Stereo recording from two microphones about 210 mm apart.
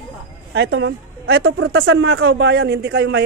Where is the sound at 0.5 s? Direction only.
55° right (ahead or behind).